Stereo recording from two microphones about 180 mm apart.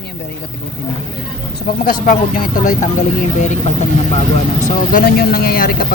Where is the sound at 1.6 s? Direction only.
50° left (ahead or behind).